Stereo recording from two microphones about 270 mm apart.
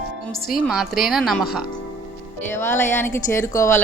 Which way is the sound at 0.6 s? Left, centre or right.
Centre.